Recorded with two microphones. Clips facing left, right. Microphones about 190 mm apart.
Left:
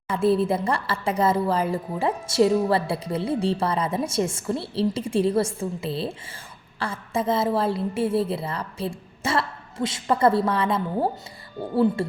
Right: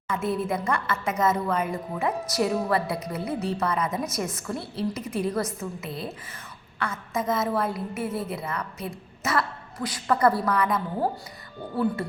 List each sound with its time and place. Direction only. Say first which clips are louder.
0.1 s a woman's voice: left 6 dB; 30° left (ahead or behind)